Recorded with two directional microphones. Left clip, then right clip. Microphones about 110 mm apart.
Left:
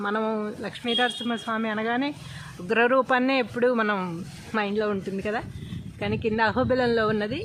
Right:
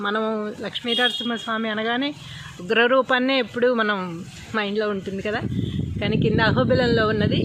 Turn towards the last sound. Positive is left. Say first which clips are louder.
# right 4 dB
turn(degrees=-15)  # may be behind; listen again after turning